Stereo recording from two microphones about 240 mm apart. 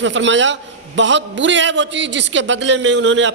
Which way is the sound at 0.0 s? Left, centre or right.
Right.